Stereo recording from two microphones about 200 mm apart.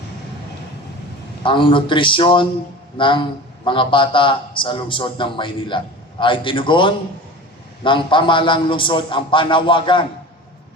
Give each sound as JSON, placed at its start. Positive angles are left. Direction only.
{"t": 1.5, "sound": "a man's voice", "side_deg": 25}